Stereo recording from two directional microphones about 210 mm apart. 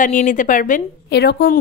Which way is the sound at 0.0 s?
40° left (ahead or behind).